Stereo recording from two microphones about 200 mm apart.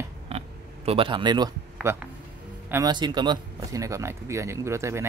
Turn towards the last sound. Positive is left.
turn(degrees=-15)  # may be behind; listen again after turning